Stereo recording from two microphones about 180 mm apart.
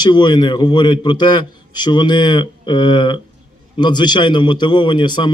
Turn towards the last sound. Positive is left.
turn(degrees=25)  # may be behind; listen again after turning